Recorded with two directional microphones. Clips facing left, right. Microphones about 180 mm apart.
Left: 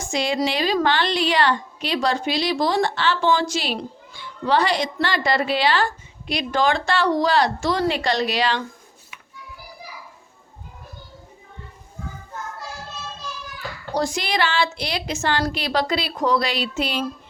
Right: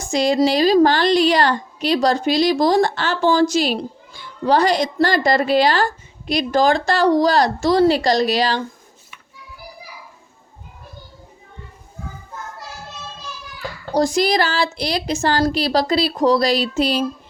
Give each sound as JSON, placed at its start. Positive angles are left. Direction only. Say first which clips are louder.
{"t": 0.0, "sound": "a woman's voice", "louder": "right 6 dB", "side_deg": -40}
{"t": 13.9, "sound": "a woman's voice", "louder": "right 7 dB", "side_deg": -40}